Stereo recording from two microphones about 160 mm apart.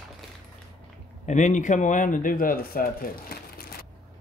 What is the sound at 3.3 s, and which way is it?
Crumpling, 75° left (ahead or behind).